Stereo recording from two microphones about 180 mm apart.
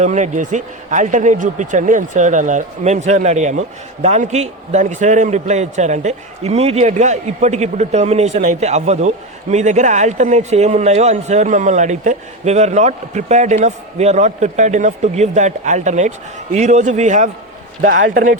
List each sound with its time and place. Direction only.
0.0 s speech: 40° right (ahead or behind)